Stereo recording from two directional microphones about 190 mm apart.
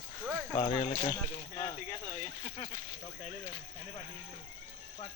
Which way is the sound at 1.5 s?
20° left (ahead or behind).